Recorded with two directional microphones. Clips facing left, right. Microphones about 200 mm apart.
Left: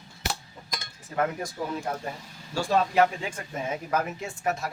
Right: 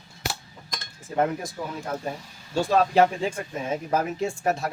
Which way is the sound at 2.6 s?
25° right (ahead or behind).